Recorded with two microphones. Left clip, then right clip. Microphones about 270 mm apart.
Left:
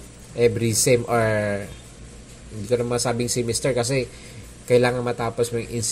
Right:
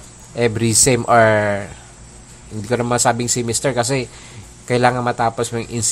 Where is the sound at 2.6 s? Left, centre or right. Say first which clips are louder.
Right 5 dB; right.